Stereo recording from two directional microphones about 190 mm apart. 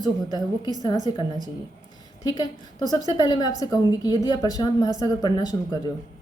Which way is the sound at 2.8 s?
20° right (ahead or behind).